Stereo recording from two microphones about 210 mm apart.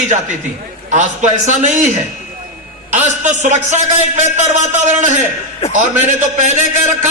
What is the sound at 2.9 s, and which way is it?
A man's voice, 35° right (ahead or behind).